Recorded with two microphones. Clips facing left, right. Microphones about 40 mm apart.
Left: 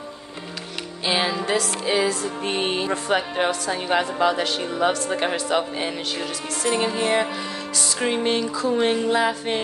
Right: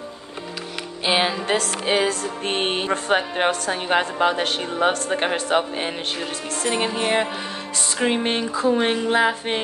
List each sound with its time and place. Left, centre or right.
1.0 s speech: right
1.6 s music: right
6.7 s speech: right
7.7 s music: right
8.0 s speech: right